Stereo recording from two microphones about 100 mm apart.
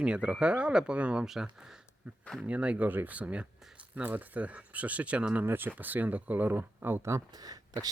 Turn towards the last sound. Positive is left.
turn(degrees=-40)  # may be behind; listen again after turning